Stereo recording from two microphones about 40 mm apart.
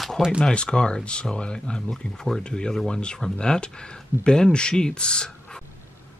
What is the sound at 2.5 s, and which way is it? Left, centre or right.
Speech, centre.